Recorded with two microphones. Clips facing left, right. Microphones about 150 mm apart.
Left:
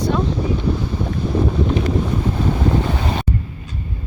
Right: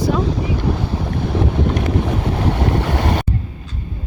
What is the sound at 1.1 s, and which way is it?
Boat, 75° right (ahead or behind).